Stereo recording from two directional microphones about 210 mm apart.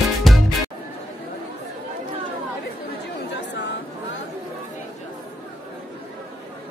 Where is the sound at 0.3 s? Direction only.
Centre (ahead or behind).